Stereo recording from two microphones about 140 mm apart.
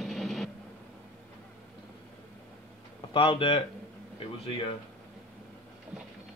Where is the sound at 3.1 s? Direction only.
40° left (ahead or behind).